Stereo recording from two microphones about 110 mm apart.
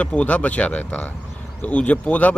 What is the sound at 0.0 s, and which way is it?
A man's voice, 15° left (ahead or behind).